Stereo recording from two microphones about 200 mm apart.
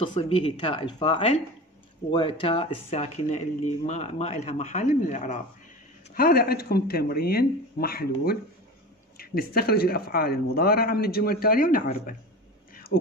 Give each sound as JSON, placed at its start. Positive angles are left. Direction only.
{"t": 0.0, "sound": "speech", "side_deg": 25}
{"t": 6.1, "sound": "speech", "side_deg": 50}
{"t": 12.7, "sound": "a sound", "side_deg": 50}